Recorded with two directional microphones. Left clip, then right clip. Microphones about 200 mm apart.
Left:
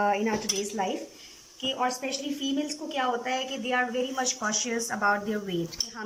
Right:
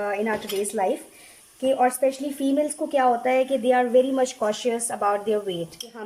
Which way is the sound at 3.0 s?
25° right (ahead or behind).